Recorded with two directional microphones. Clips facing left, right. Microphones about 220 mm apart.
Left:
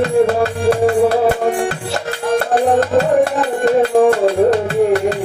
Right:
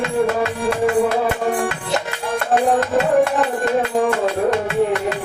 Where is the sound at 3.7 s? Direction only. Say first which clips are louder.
Left 10 dB; 35° left (ahead or behind).